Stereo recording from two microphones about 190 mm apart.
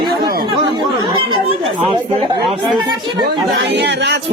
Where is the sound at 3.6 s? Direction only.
65° right (ahead or behind).